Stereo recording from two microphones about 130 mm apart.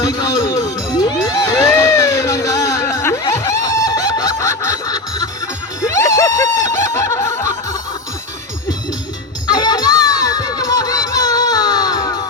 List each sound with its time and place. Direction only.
0.0 s music: 30° left (ahead or behind)
5.8 s snicker: 25° left (ahead or behind)
9.5 s crowd: 30° left (ahead or behind)